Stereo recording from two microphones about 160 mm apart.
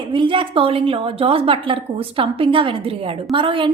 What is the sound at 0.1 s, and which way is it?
A woman's voice, 30° right (ahead or behind).